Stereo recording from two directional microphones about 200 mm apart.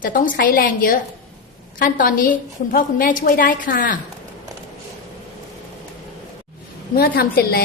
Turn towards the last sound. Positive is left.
turn(degrees=50)  # may be behind; listen again after turning